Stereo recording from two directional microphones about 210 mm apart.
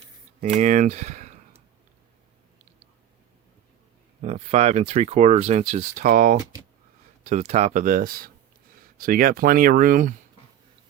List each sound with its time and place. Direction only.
0.5 s speech: 35° right (ahead or behind)
4.2 s speech: 30° right (ahead or behind)